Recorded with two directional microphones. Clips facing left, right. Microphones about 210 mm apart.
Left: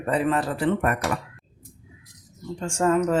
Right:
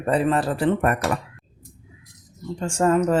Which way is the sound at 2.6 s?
35° right (ahead or behind).